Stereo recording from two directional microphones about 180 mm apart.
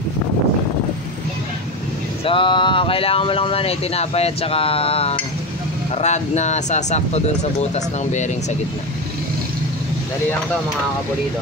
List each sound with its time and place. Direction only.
2.2 s speech: 30° left (ahead or behind)